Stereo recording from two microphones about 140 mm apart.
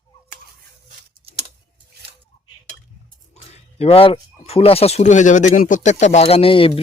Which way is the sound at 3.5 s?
45° left (ahead or behind).